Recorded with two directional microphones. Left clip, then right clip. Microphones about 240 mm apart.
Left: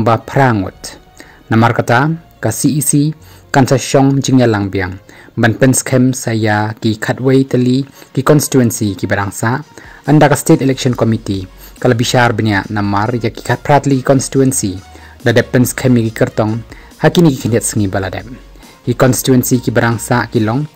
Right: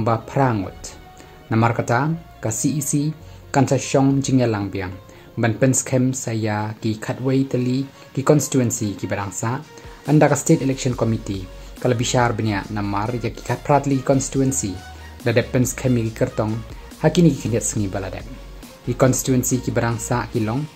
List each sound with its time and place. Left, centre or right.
0.0 s speech: left